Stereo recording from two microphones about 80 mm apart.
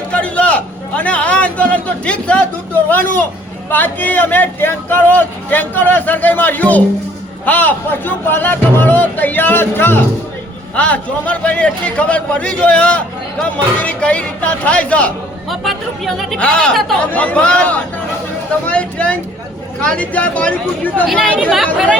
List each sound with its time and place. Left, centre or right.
0.1 s a man's voice: centre
15.4 s a woman's voice: centre